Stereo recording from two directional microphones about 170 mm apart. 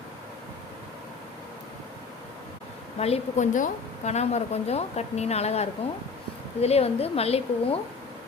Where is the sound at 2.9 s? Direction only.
35° left (ahead or behind).